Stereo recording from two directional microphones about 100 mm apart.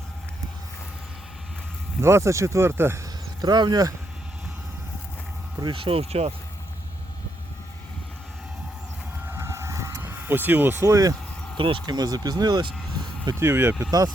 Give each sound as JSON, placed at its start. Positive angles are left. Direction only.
{"t": 2.0, "sound": "speech", "side_deg": -25}
{"t": 3.4, "sound": "speech", "side_deg": -45}
{"t": 5.5, "sound": "speech", "side_deg": -50}
{"t": 9.2, "sound": "vehicle", "side_deg": -25}
{"t": 11.5, "sound": "speech", "side_deg": -55}
{"t": 11.9, "sound": "speech", "side_deg": -40}
{"t": 13.4, "sound": "speech", "side_deg": -25}